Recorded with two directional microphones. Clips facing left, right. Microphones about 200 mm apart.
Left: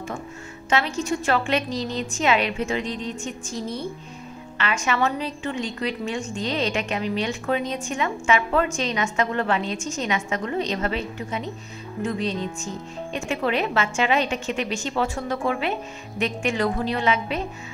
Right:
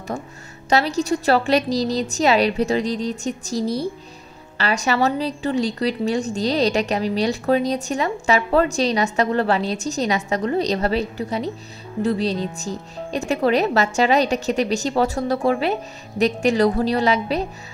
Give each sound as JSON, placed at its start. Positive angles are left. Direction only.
{"t": 0.7, "sound": "a woman's voice", "side_deg": -40}